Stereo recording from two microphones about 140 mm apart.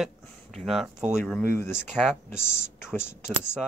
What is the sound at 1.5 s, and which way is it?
Speech, 15° left (ahead or behind).